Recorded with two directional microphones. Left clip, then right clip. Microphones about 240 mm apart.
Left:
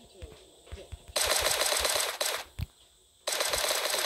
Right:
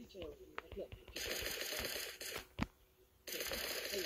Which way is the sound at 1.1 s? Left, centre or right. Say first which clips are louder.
Left 15 dB; centre.